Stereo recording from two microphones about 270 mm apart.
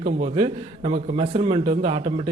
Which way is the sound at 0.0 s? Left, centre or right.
Right.